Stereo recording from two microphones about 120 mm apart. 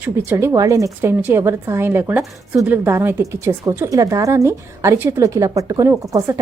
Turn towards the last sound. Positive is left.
turn(degrees=-25)  # may be behind; listen again after turning